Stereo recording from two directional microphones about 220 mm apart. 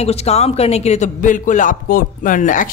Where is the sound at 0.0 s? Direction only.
30° left (ahead or behind).